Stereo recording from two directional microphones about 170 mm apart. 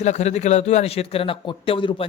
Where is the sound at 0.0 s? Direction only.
40° left (ahead or behind).